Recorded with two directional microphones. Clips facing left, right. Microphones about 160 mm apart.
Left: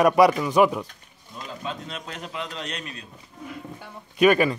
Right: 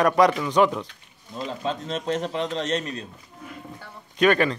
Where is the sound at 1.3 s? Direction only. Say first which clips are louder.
Right 5 dB; 35° right (ahead or behind).